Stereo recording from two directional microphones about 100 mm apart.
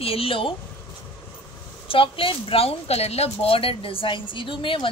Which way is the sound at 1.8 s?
65° left (ahead or behind).